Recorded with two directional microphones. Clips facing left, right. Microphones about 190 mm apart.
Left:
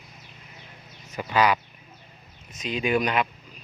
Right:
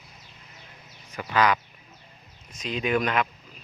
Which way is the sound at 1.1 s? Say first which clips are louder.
Left 1 dB; 20° left (ahead or behind).